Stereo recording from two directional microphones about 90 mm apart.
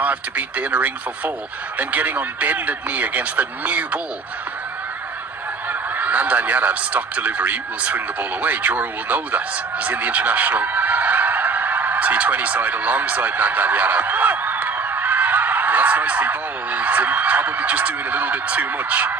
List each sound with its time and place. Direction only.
0.0 s speech: 15° right (ahead or behind)
5.6 s speech: 20° right (ahead or behind)